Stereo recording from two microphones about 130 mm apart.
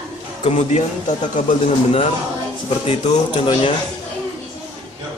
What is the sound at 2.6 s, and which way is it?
Speech, 50° left (ahead or behind).